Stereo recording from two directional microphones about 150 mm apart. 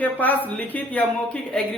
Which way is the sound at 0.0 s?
10° left (ahead or behind).